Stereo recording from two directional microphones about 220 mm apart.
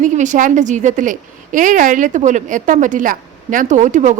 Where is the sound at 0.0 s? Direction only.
35° right (ahead or behind).